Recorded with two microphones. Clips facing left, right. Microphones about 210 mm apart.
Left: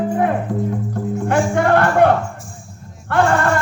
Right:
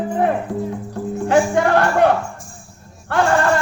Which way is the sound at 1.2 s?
55° left (ahead or behind).